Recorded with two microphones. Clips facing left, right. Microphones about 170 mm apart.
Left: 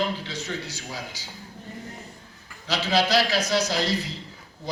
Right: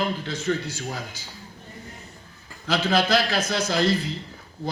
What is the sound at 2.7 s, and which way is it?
Speech, 50° right (ahead or behind).